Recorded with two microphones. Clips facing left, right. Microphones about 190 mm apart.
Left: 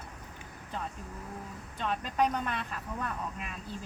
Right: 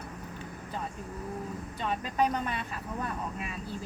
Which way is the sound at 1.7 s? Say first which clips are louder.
Even; 5° right (ahead or behind).